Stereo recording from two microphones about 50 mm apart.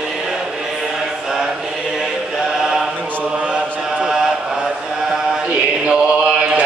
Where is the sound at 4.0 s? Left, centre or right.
Centre.